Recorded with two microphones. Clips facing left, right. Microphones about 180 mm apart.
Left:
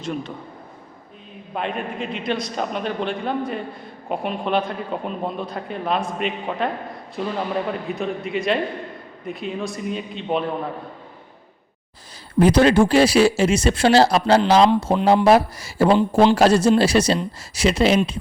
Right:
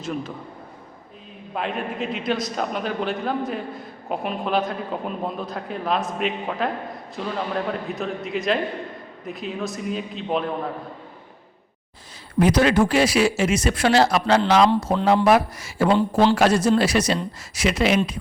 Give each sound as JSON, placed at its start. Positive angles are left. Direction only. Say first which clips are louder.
{"t": 0.0, "sound": "a man's voice", "louder": "left 1 dB", "side_deg": -5}
{"t": 1.5, "sound": "a man's voice", "louder": "even", "side_deg": 0}
{"t": 12.4, "sound": "speech", "louder": "left 3 dB", "side_deg": 30}
{"t": 16.0, "sound": "speech", "louder": "left 2 dB", "side_deg": 20}
{"t": 16.3, "sound": "speech", "louder": "left 3 dB", "side_deg": 30}